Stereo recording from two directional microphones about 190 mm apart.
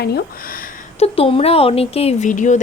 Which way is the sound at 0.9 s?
30° left (ahead or behind).